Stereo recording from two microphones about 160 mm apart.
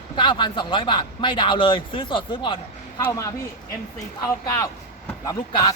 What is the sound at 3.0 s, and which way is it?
A man's voice, 20° left (ahead or behind).